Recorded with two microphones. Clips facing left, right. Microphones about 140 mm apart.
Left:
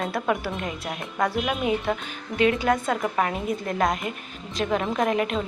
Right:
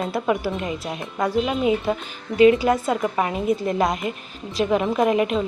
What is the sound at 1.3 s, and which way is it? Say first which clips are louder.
Speech: right 4 dB; 25° right (ahead or behind).